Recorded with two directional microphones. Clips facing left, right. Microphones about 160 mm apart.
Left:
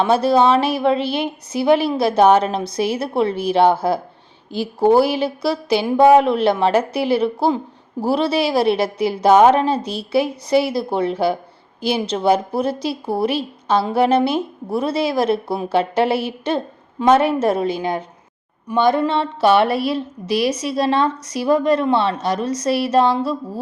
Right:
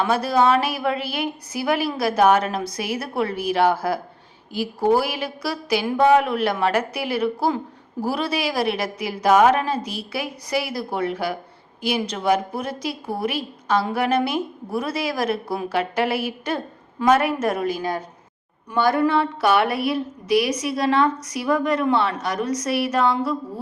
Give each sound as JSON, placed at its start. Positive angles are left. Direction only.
{"t": 0.0, "sound": "a woman's voice", "side_deg": 25}